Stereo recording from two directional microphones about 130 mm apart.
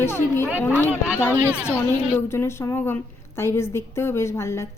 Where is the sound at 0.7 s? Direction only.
15° right (ahead or behind).